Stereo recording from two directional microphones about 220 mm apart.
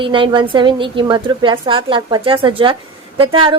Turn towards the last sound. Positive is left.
turn(degrees=-25)  # may be behind; listen again after turning